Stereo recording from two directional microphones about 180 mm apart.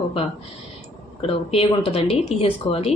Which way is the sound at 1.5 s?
30° left (ahead or behind).